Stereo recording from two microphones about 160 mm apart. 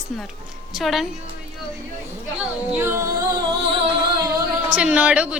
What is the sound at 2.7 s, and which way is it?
Speech, 15° right (ahead or behind).